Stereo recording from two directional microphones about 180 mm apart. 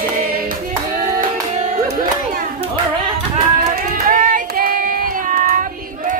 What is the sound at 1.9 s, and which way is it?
Music, 50° right (ahead or behind).